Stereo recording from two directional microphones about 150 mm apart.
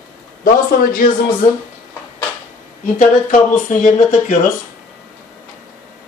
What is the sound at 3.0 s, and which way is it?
Speech, 60° left (ahead or behind).